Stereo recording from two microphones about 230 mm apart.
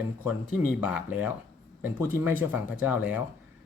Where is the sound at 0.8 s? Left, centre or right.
Centre.